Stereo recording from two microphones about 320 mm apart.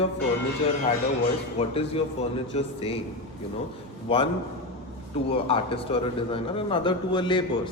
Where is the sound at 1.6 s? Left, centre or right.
Centre.